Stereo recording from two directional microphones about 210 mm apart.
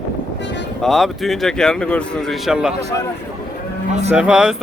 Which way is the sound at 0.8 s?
Centre (ahead or behind).